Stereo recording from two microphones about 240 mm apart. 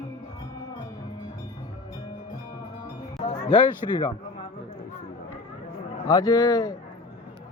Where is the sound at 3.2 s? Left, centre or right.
Left.